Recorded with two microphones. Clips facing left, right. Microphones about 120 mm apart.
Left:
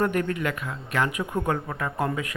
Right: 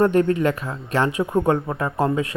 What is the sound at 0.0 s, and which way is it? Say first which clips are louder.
Speech: right 8 dB; 30° right (ahead or behind).